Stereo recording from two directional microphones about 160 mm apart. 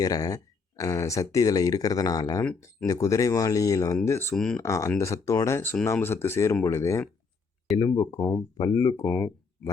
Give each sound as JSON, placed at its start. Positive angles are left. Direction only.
{"t": 0.0, "sound": "speech", "side_deg": 20}
{"t": 4.4, "sound": "speech", "side_deg": 5}
{"t": 4.6, "sound": "speech", "side_deg": 20}